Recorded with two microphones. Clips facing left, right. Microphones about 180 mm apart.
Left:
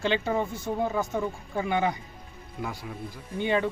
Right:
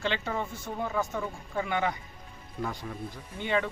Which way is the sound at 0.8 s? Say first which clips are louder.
Left 2 dB; 20° left (ahead or behind).